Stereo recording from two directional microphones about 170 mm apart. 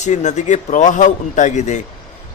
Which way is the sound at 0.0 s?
45° left (ahead or behind).